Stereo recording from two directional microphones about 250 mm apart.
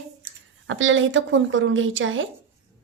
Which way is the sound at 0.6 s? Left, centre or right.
Right.